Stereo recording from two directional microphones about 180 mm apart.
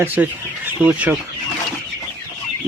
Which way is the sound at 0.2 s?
10° right (ahead or behind).